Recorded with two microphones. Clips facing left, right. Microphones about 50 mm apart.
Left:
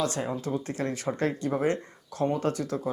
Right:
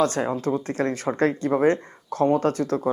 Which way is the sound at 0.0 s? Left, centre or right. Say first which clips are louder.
Right 7 dB; right.